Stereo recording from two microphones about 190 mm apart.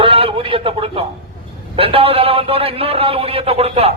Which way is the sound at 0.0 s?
30° right (ahead or behind).